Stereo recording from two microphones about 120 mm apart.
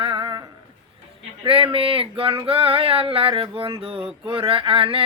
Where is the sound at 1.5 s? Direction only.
50° right (ahead or behind).